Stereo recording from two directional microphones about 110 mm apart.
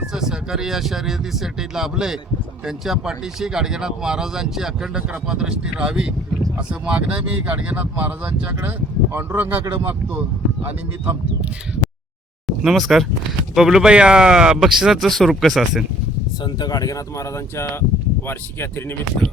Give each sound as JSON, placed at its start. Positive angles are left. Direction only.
{"t": 0.1, "sound": "speech", "side_deg": -5}
{"t": 9.1, "sound": "speech", "side_deg": -20}
{"t": 12.5, "sound": "speech", "side_deg": 0}
{"t": 16.4, "sound": "speech", "side_deg": 40}